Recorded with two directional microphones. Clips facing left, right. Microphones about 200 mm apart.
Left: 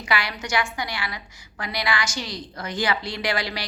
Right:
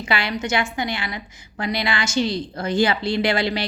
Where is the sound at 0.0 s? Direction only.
25° right (ahead or behind).